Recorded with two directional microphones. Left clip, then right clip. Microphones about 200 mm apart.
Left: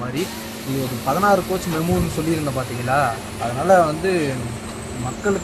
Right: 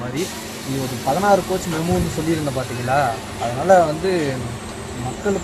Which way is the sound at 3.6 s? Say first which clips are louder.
Right 1 dB; 10° left (ahead or behind).